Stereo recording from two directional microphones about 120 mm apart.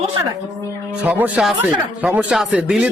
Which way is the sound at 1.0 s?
15° right (ahead or behind).